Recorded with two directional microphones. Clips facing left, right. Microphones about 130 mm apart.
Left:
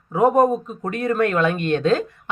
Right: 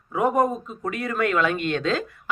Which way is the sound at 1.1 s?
35° left (ahead or behind).